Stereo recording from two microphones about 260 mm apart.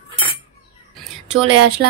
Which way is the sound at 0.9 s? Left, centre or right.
Centre.